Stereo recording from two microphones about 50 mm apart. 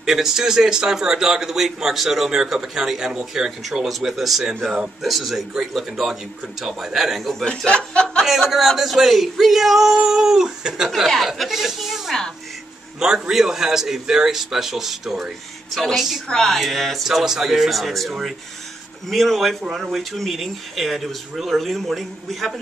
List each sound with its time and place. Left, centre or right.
0.0 s a man's voice: centre
7.2 s speech: centre
7.4 s speech: left
8.3 s speech: centre
11.1 s speech: centre
13.0 s a man's voice: centre
16.3 s speech: centre